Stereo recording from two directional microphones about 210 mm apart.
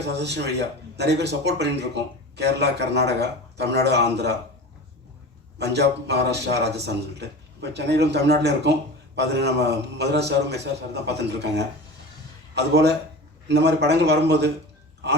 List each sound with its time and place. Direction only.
0.0 s a man's voice: 55° right (ahead or behind)
5.5 s speech: 55° right (ahead or behind)